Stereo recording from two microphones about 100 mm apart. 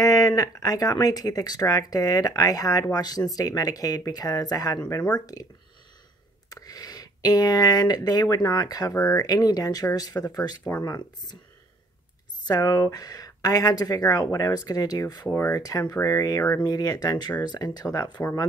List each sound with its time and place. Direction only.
0.0 s speech: 40° left (ahead or behind)
6.5 s speech: 40° left (ahead or behind)
12.4 s speech: 35° left (ahead or behind)